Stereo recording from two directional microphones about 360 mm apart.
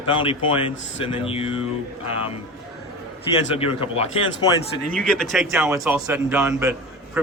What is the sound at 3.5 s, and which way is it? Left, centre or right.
Speech, centre.